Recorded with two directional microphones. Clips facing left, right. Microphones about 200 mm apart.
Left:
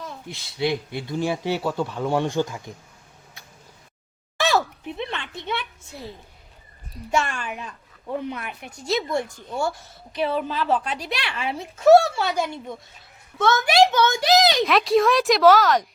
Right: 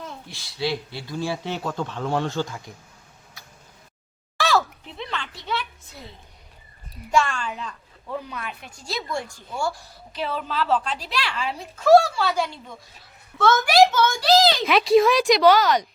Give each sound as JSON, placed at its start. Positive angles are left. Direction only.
{"t": 0.3, "sound": "a woman's voice", "side_deg": 20}
{"t": 1.5, "sound": "speech", "side_deg": 10}
{"t": 4.4, "sound": "a sound", "side_deg": 20}
{"t": 7.1, "sound": "a woman's voice", "side_deg": 20}
{"t": 8.7, "sound": "a woman's voice", "side_deg": 20}
{"t": 14.6, "sound": "speech", "side_deg": 0}